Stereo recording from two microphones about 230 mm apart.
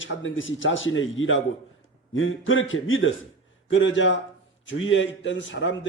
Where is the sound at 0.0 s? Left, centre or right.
Left.